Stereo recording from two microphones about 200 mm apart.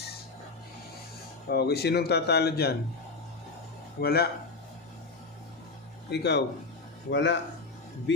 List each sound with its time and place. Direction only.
1.5 s speech: 55° left (ahead or behind)
4.0 s speech: 50° left (ahead or behind)
6.1 s speech: 60° left (ahead or behind)